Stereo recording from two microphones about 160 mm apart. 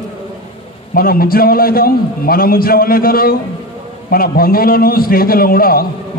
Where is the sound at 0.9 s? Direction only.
65° left (ahead or behind).